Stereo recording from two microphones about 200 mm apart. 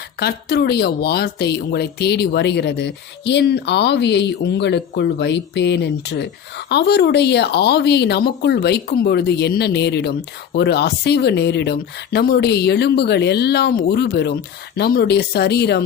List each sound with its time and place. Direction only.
0.2 s speech: 55° left (ahead or behind)